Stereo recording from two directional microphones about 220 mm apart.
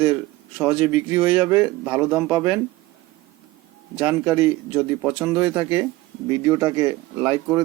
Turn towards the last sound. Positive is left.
turn(degrees=-20)  # may be behind; listen again after turning